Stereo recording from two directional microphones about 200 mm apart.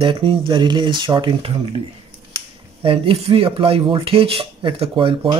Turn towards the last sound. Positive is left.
turn(degrees=-25)  # may be behind; listen again after turning